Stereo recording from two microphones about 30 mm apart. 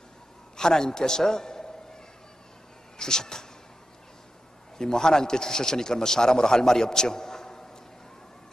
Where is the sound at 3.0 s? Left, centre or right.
Left.